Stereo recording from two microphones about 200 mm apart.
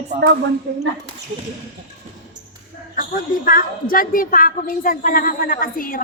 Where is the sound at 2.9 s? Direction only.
45° left (ahead or behind).